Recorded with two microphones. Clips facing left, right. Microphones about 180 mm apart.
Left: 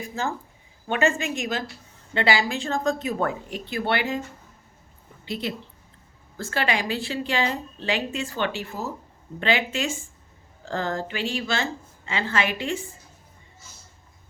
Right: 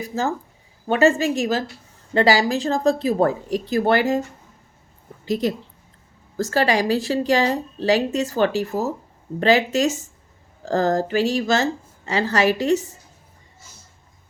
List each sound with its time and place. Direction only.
0.1 s a woman's voice: 40° right (ahead or behind)
5.2 s a woman's voice: 40° right (ahead or behind)